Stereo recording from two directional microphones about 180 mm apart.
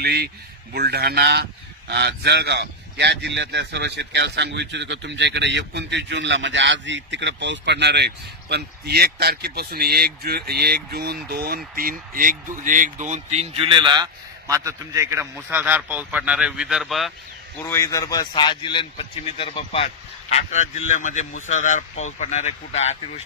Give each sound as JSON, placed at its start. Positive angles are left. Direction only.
{"t": 0.0, "sound": "a man's voice", "side_deg": -60}
{"t": 17.6, "sound": "speech", "side_deg": 15}